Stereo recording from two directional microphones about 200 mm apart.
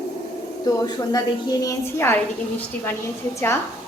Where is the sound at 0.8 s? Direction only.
20° left (ahead or behind).